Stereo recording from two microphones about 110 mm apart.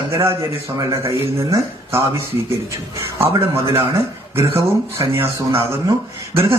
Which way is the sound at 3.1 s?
25° right (ahead or behind).